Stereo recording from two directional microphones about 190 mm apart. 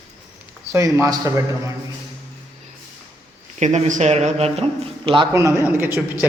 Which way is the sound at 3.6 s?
40° right (ahead or behind).